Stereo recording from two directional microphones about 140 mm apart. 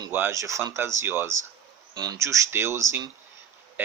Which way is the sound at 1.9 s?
30° right (ahead or behind).